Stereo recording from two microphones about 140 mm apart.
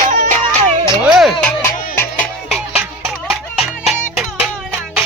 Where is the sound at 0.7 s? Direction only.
45° right (ahead or behind).